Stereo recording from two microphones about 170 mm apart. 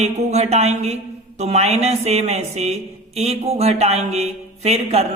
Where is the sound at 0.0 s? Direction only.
40° right (ahead or behind).